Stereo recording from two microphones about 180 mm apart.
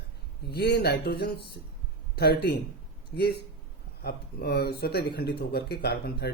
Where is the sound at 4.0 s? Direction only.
60° left (ahead or behind).